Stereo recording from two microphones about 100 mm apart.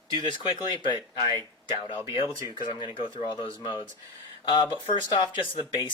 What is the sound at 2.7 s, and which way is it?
Speech, 50° left (ahead or behind).